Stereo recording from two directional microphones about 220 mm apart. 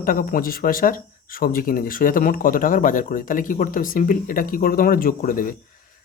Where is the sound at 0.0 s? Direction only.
40° left (ahead or behind).